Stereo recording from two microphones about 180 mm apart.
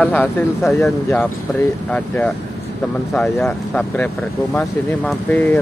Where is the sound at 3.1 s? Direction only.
5° left (ahead or behind).